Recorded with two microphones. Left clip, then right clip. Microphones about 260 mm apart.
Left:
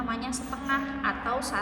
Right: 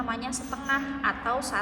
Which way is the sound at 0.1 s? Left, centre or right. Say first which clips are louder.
Right 1 dB; centre.